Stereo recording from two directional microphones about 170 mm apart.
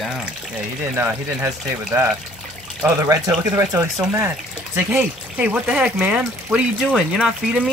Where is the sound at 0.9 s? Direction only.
15° right (ahead or behind).